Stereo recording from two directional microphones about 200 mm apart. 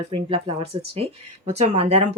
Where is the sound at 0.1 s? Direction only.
30° right (ahead or behind).